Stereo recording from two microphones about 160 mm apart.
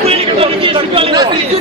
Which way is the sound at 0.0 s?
40° right (ahead or behind).